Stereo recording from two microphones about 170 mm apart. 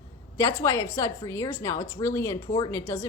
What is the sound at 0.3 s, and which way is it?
A woman's voice, 20° left (ahead or behind).